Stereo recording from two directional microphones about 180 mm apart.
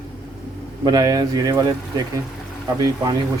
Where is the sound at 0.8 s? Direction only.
20° right (ahead or behind).